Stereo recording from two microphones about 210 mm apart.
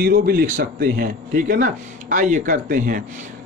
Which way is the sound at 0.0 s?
50° right (ahead or behind).